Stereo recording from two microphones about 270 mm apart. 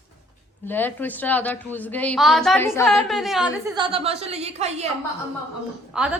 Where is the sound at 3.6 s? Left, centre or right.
Centre.